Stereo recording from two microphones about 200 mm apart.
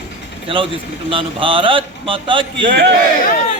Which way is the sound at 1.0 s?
25° right (ahead or behind).